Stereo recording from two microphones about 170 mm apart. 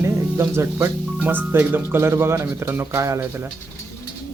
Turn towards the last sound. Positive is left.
turn(degrees=-15)  # may be behind; listen again after turning